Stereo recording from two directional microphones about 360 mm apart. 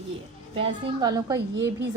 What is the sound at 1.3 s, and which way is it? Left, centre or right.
Speech, right.